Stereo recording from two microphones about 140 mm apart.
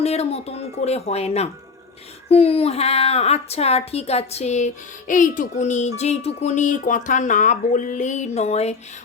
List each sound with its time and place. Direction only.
0.0 s a woman's voice: 50° left (ahead or behind)